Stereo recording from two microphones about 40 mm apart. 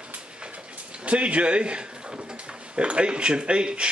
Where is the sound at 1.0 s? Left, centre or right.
Right.